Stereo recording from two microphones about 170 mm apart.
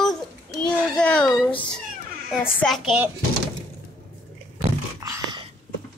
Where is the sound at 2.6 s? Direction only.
Centre (ahead or behind).